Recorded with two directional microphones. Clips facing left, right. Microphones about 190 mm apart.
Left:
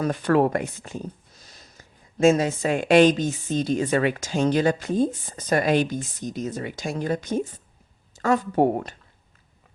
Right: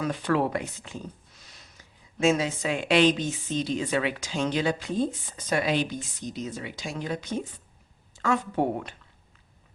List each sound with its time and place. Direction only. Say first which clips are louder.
0.0 s speech: left 5 dB; 45° left (ahead or behind)